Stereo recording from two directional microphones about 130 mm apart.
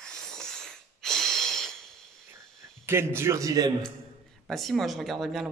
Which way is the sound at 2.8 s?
20° right (ahead or behind).